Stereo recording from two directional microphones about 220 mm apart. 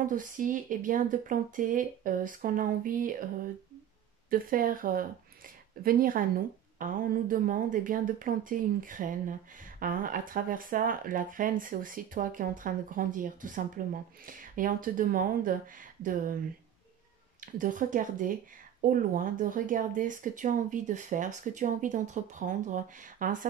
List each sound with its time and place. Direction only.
0.0 s speech: 35° right (ahead or behind)
4.3 s speech: 40° right (ahead or behind)
17.4 s speech: 35° right (ahead or behind)